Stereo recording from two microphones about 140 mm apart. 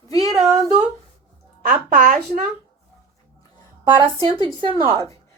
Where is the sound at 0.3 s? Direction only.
Centre (ahead or behind).